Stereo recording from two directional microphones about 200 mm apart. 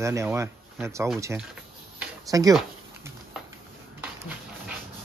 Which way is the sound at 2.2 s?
15° right (ahead or behind).